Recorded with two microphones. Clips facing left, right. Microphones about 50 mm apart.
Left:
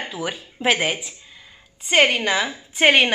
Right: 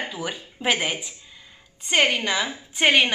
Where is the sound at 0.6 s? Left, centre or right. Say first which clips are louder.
Left 3 dB; centre.